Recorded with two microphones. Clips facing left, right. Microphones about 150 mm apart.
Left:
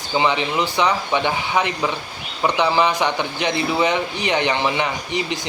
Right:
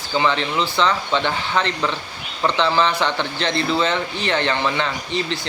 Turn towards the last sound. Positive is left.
turn(degrees=15)  # may be behind; listen again after turning